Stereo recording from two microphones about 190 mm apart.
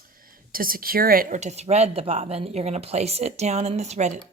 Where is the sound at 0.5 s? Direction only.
50° right (ahead or behind).